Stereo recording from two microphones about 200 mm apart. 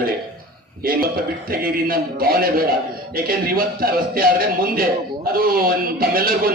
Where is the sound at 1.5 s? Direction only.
45° right (ahead or behind).